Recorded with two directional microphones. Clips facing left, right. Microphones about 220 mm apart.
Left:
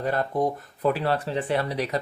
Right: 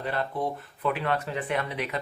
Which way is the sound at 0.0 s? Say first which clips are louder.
Left 5 dB; 45° left (ahead or behind).